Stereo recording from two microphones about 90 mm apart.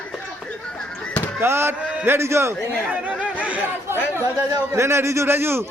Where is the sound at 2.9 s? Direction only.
15° right (ahead or behind).